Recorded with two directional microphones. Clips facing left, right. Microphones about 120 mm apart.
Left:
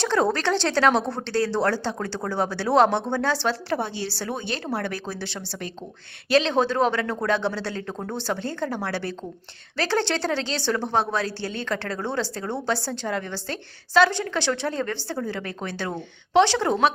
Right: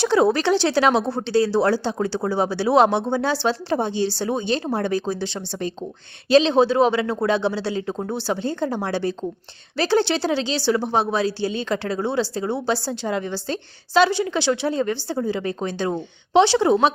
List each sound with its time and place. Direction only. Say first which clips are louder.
0.0 s a woman's voice: right 4 dB; 10° right (ahead or behind)